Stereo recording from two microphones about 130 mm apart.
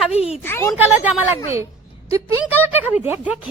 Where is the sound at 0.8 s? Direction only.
15° right (ahead or behind).